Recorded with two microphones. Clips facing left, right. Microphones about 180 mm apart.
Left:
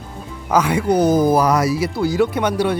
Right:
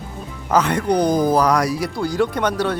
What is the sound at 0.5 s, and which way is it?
Speech, 10° left (ahead or behind).